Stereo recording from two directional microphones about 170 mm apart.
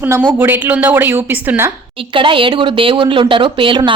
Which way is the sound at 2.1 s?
30° right (ahead or behind).